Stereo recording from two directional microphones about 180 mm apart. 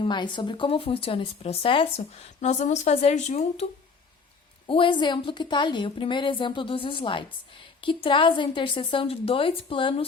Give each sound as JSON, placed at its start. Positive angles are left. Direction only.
{"t": 0.0, "sound": "speech", "side_deg": 25}
{"t": 4.6, "sound": "a woman's voice", "side_deg": 30}